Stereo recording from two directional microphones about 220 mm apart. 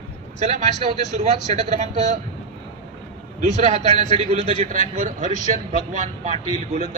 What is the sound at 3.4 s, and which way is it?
Speech, 30° right (ahead or behind).